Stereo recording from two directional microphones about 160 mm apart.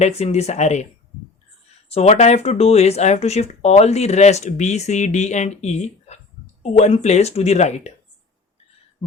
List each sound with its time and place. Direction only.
0.0 s speech: 40° left (ahead or behind)
1.9 s speech: 45° left (ahead or behind)